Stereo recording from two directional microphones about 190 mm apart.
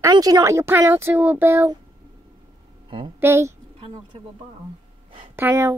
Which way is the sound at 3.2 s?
15° right (ahead or behind).